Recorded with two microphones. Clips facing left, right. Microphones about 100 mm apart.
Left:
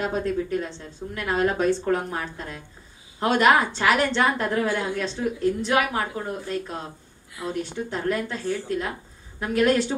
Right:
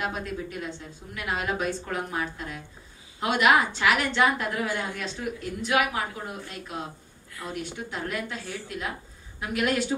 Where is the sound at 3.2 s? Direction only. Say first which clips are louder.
Left 3 dB; 40° left (ahead or behind).